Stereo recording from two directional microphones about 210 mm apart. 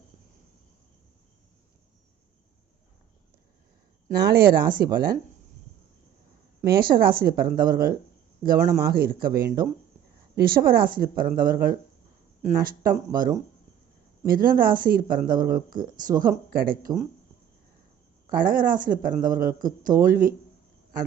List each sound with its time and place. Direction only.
4.2 s speech: 50° right (ahead or behind)
6.6 s speech: 45° right (ahead or behind)
18.3 s speech: 40° right (ahead or behind)